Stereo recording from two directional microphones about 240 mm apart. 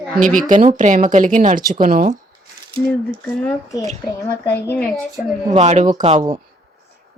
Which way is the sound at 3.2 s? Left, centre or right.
Centre.